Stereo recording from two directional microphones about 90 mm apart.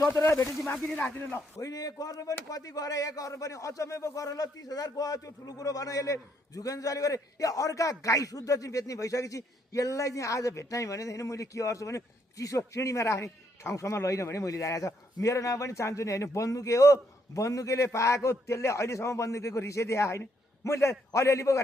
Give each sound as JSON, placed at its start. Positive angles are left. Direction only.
{"t": 0.0, "sound": "speech", "side_deg": 30}
{"t": 1.6, "sound": "speech", "side_deg": 45}